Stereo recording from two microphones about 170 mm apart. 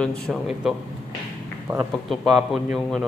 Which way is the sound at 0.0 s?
5° left (ahead or behind).